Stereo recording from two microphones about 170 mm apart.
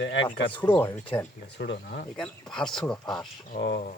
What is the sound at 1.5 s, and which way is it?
Speech, 85° left.